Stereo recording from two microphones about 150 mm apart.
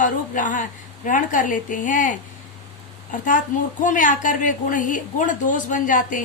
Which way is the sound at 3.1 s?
60° left (ahead or behind).